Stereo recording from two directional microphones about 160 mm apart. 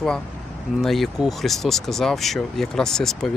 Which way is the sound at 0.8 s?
Centre (ahead or behind).